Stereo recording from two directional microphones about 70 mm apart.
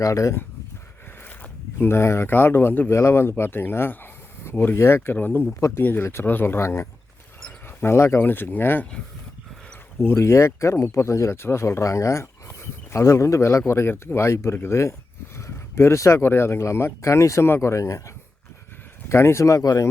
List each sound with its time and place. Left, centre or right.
0.0 s speech: left
1.2 s a sound: left
1.9 s speech: left
2.9 s speech: left
5.1 s speech: left
5.5 s speech: left
5.8 s speech: left
10.0 s speech: left